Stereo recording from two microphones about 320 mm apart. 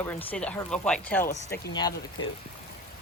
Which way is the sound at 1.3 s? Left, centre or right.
Left.